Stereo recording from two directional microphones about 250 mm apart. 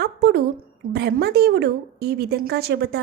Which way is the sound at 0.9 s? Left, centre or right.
Right.